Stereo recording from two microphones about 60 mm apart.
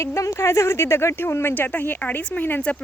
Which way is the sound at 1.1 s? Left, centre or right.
Left.